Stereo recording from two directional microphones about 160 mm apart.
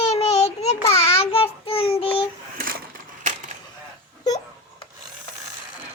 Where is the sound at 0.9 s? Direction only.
40° left (ahead or behind).